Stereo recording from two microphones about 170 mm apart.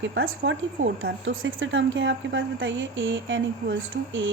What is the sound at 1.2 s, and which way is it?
A woman's voice, 90° right.